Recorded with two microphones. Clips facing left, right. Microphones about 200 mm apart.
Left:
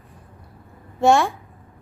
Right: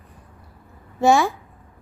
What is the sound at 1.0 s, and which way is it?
Speech, centre (ahead or behind).